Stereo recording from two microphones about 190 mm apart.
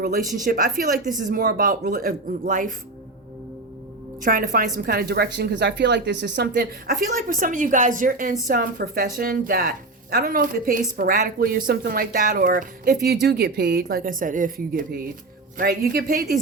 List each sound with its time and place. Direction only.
0.4 s a woman's voice: 45° right (ahead or behind)
4.2 s a woman's voice: 45° right (ahead or behind)
7.1 s a woman's voice: 45° right (ahead or behind)